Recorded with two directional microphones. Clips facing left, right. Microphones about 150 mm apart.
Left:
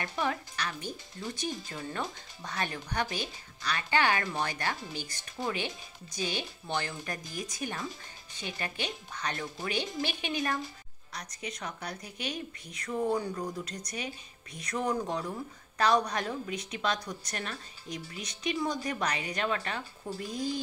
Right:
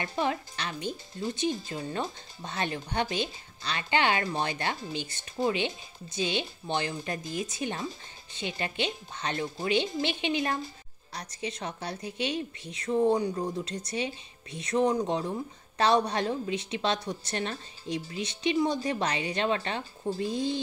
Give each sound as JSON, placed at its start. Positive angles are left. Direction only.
{"t": 0.0, "sound": "a woman's voice", "side_deg": -25}